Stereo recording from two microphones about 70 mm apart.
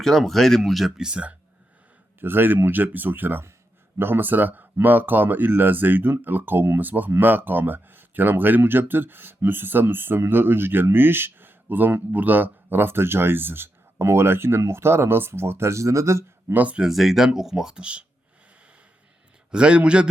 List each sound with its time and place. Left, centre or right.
0.0 s speech: centre
2.2 s speech: right
16.5 s speech: right
16.8 s speech: centre
19.5 s speech: centre